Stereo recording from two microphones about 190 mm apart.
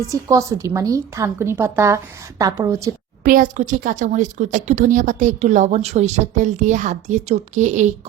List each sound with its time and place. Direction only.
0.1 s a woman's voice: 15° right (ahead or behind)
3.2 s a woman's voice: 45° right (ahead or behind)